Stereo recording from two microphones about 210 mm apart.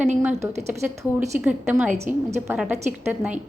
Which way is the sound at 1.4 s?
10° right (ahead or behind).